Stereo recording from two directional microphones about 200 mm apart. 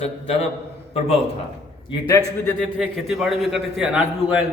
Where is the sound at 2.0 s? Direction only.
15° left (ahead or behind).